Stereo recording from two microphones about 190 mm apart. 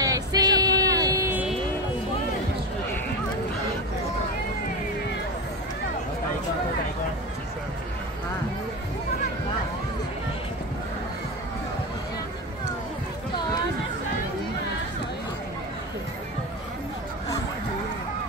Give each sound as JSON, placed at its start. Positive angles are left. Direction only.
{"t": 0.0, "sound": "vehicle", "side_deg": -20}